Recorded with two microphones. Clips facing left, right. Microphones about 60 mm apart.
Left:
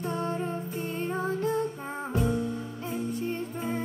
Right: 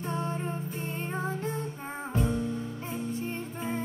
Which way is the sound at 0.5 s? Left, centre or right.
Right.